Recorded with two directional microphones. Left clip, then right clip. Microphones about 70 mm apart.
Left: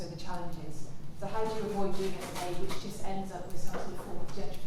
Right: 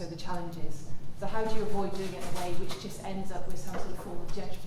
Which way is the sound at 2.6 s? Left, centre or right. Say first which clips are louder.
Even; right.